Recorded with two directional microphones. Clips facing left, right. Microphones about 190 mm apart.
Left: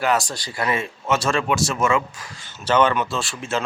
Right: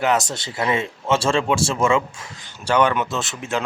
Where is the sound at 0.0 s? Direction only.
20° right (ahead or behind).